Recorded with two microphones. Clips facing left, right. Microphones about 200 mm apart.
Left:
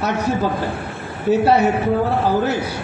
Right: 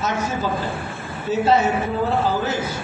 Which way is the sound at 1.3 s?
65° left (ahead or behind).